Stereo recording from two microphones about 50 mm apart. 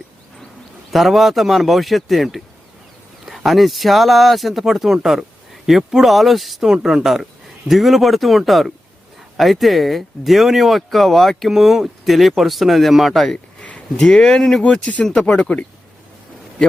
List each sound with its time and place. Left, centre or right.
0.9 s speech: centre
13.6 s a sound: left
14.0 s speech: centre
14.6 s speech: left